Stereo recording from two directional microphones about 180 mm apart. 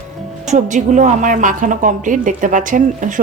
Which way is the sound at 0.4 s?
40° right (ahead or behind).